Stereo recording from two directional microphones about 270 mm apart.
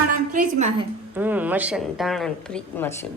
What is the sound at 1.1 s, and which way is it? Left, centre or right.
A woman's voice, centre.